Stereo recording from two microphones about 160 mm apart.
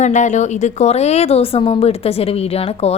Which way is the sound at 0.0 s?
50° left (ahead or behind).